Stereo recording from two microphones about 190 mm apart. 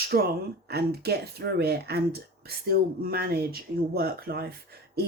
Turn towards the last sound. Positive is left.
turn(degrees=-55)  # may be behind; listen again after turning